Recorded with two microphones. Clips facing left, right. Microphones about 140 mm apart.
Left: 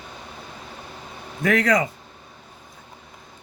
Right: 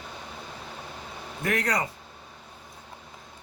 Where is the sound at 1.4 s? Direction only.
90° left.